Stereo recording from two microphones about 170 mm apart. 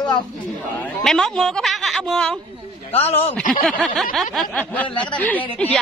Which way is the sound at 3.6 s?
Centre (ahead or behind).